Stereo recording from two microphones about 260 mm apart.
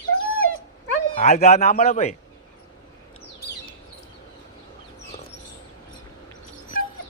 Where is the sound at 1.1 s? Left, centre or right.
Left.